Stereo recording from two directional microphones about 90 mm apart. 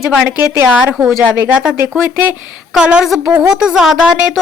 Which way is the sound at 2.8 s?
10° right (ahead or behind).